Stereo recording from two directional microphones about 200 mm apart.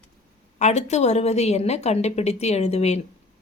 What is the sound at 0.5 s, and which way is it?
A woman's voice, 35° left (ahead or behind).